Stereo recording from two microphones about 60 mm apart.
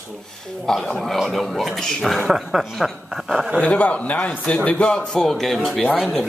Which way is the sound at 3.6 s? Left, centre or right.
Left.